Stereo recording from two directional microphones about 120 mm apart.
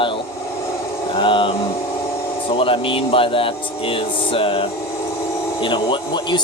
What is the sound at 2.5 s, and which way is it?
Speech, 50° left (ahead or behind).